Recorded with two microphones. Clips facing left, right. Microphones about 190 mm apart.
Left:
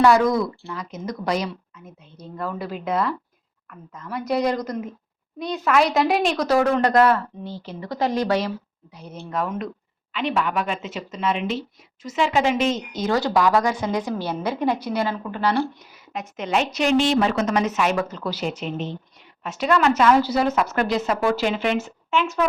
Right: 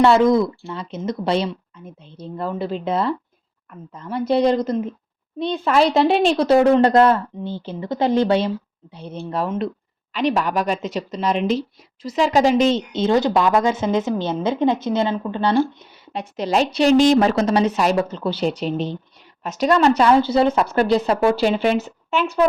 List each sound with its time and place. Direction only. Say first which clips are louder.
0.0 s a woman's voice: right 3 dB; 25° right (ahead or behind)